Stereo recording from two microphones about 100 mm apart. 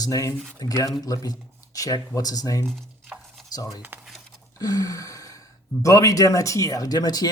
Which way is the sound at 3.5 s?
40° left (ahead or behind).